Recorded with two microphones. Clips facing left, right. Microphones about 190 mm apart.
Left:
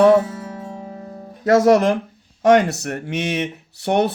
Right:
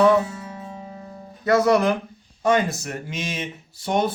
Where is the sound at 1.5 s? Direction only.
45° left (ahead or behind).